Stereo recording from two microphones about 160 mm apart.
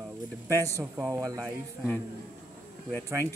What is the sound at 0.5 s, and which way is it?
Speech, 20° right (ahead or behind).